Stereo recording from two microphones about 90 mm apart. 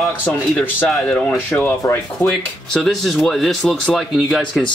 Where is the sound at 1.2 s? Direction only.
20° left (ahead or behind).